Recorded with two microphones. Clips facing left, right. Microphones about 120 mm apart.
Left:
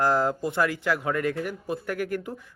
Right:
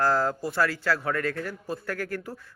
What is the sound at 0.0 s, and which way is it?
Speech, 20° left (ahead or behind).